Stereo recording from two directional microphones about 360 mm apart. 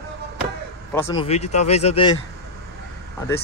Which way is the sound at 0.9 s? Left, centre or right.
Centre.